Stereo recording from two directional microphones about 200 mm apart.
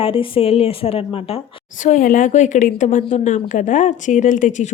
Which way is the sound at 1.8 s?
40° left (ahead or behind).